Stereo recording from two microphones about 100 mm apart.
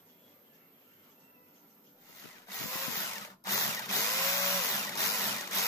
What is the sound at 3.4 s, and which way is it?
Drill, 35° left (ahead or behind).